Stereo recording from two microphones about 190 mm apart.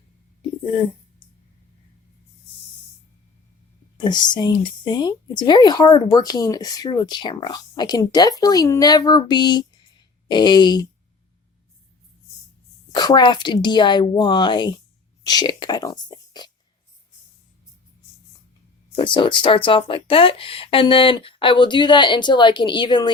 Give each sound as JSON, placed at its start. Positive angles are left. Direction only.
{"t": 3.9, "sound": "a woman's voice", "side_deg": 20}
{"t": 12.9, "sound": "a woman's voice", "side_deg": 20}
{"t": 18.9, "sound": "a woman's voice", "side_deg": 25}